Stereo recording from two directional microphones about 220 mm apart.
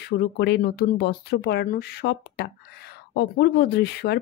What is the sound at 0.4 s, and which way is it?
Speech, 50° left (ahead or behind).